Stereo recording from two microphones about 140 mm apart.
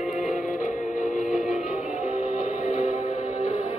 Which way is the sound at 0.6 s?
65° left (ahead or behind).